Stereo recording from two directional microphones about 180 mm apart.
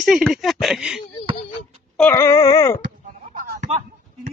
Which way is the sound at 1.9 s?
10° left (ahead or behind).